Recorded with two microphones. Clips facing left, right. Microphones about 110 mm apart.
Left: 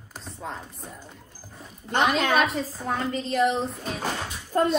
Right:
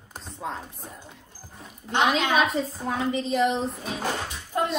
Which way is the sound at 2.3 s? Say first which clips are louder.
Even; centre (ahead or behind).